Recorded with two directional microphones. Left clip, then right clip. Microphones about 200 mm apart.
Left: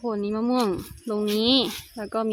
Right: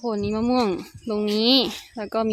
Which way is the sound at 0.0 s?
10° right (ahead or behind).